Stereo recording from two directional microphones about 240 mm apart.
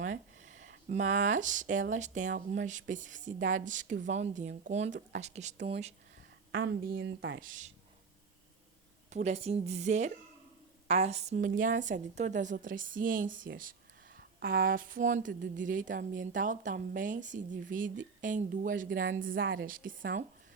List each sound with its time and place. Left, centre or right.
0.0 s a sound: right
1.9 s a woman's voice: right
6.5 s a woman's voice: right
7.3 s speech: right
9.0 s a woman's voice: right
19.1 s a woman's voice: right
19.6 s speech: right